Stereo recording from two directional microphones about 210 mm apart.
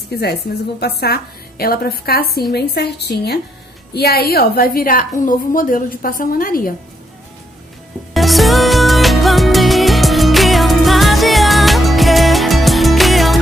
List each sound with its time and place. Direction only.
0.1 s a woman's voice: 50° left (ahead or behind)
8.1 s music: centre (ahead or behind)